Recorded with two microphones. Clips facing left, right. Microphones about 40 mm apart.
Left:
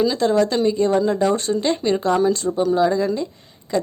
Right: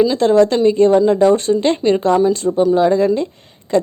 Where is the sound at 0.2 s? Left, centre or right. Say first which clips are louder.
Right 6 dB; right.